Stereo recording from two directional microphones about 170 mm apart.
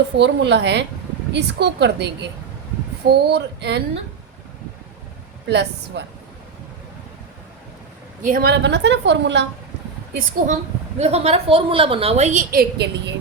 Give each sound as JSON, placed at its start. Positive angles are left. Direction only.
{"t": 0.2, "sound": "a woman's voice", "side_deg": -90}
{"t": 5.5, "sound": "a woman's voice", "side_deg": -90}
{"t": 8.2, "sound": "a woman's voice", "side_deg": -60}
{"t": 10.2, "sound": "a woman's voice", "side_deg": -45}
{"t": 12.5, "sound": "speech", "side_deg": -80}